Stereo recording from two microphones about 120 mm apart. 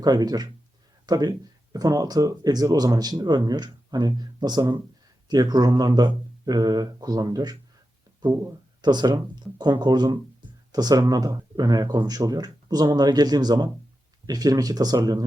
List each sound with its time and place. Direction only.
0.0 s speech: 35° right (ahead or behind)
8.8 s speech: 35° right (ahead or behind)